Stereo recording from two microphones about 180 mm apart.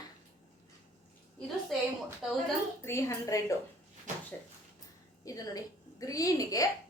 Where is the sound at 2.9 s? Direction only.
15° left (ahead or behind).